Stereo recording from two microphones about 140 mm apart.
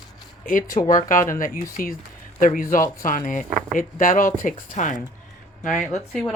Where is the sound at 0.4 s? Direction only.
75° left (ahead or behind).